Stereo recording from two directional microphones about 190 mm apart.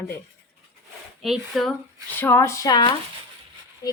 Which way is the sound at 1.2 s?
Centre (ahead or behind).